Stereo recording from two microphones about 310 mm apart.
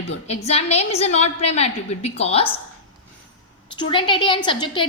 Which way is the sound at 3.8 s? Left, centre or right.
Centre.